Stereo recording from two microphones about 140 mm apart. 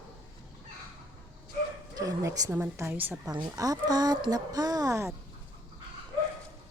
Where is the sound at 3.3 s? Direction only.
25° right (ahead or behind).